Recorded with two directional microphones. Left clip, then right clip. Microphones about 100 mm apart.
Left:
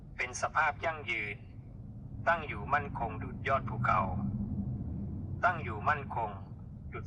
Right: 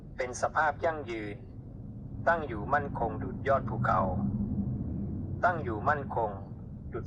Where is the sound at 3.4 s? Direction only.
20° left (ahead or behind).